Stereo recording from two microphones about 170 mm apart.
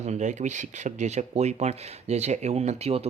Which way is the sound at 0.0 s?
45° right (ahead or behind).